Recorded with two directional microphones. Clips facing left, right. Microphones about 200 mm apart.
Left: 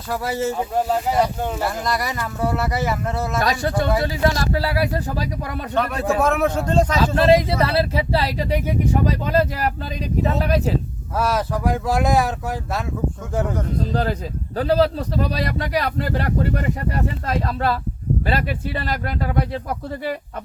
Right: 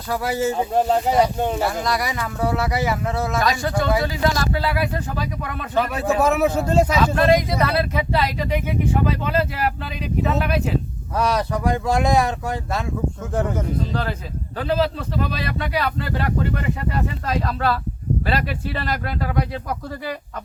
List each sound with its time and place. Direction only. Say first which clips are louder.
0.1 s speech: right 1 dB; centre (ahead or behind)
0.5 s speech: right 2 dB; 25° right (ahead or behind)
1.6 s speech: right 1 dB; centre (ahead or behind)
3.4 s speech: left 2 dB; 35° left (ahead or behind)
5.7 s speech: right 1 dB; 5° right (ahead or behind)
7.0 s speech: left 2 dB; 30° left (ahead or behind)
11.2 s speech: even; 5° left (ahead or behind)
13.9 s speech: left 3 dB; 35° left (ahead or behind)